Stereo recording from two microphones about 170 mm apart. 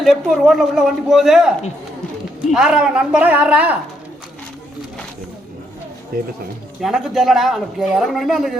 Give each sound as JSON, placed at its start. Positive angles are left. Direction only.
{"t": 0.0, "sound": "a woman's voice", "side_deg": 0}
{"t": 6.1, "sound": "speech", "side_deg": -60}
{"t": 6.8, "sound": "speech", "side_deg": 0}